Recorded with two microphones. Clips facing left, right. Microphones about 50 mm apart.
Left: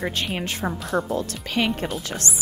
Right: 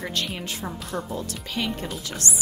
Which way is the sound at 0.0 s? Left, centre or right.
Left.